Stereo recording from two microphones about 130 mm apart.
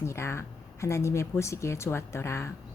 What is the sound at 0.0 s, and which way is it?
A woman's voice, 20° left (ahead or behind).